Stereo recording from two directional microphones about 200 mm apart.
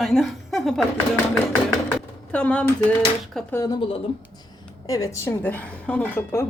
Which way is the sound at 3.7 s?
25° left (ahead or behind).